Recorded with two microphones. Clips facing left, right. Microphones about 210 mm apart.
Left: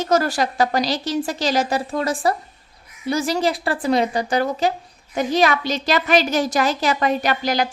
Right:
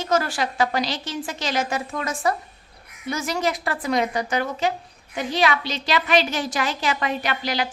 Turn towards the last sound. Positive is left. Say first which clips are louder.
# left 5 dB
turn(degrees=45)  # may be behind; listen again after turning